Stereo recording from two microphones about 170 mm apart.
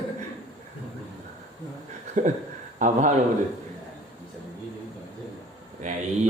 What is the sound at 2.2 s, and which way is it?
Speech, 50° right (ahead or behind).